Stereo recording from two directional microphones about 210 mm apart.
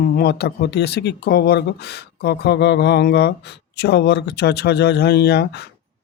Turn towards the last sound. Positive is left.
turn(degrees=50)  # may be behind; listen again after turning